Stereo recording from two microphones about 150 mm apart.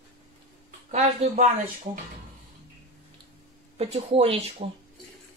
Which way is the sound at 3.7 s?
40° right (ahead or behind).